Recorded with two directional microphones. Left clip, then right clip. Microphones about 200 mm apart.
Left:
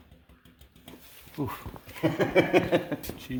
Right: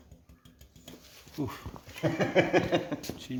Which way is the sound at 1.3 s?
30° left (ahead or behind).